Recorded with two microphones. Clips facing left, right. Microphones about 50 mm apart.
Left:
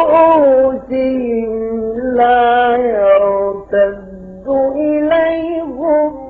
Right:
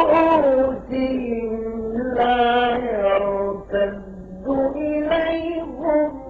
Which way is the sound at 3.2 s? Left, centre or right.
Left.